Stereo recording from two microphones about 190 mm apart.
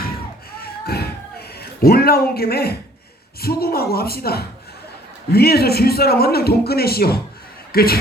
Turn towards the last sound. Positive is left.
turn(degrees=55)  # may be behind; listen again after turning